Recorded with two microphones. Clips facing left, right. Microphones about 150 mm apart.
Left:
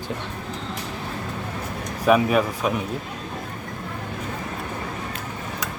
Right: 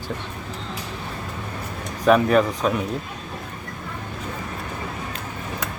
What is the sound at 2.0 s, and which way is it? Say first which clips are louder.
Speech: right 2 dB; 5° left (ahead or behind).